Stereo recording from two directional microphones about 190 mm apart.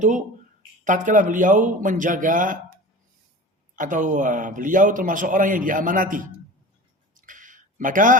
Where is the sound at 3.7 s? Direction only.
45° right (ahead or behind).